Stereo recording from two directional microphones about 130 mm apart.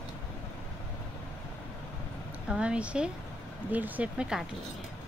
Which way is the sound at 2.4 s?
10° right (ahead or behind).